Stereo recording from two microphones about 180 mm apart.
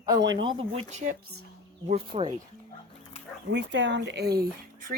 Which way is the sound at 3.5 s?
80° right.